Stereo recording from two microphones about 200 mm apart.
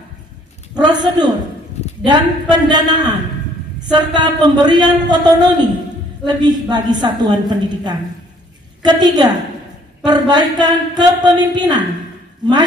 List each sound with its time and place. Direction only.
0.7 s a woman's voice: 20° right (ahead or behind)